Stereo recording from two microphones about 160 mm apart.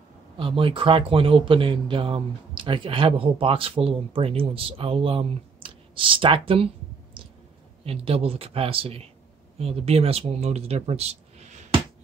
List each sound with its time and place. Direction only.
0.4 s speech: 35° right (ahead or behind)
7.2 s a sound: 35° right (ahead or behind)
7.8 s speech: 40° right (ahead or behind)